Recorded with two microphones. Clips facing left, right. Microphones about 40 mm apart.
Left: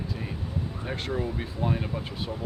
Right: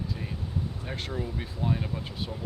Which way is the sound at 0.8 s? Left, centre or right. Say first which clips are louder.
Left 4 dB; centre.